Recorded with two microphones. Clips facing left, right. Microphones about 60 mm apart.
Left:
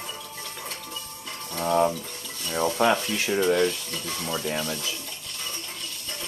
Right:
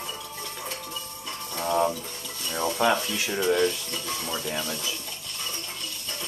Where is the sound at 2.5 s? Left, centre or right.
Centre.